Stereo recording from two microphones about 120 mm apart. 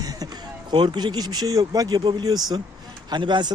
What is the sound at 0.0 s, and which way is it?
Speech, 30° right (ahead or behind).